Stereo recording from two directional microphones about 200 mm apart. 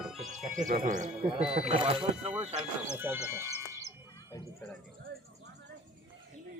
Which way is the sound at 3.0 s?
10° right (ahead or behind).